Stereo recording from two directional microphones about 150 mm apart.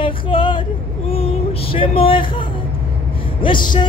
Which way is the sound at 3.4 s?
30° left (ahead or behind).